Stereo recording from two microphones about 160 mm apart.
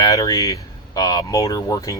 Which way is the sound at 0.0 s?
20° left (ahead or behind).